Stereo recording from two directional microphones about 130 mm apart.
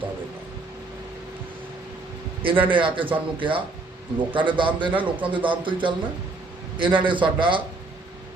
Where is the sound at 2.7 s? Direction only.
40° right (ahead or behind).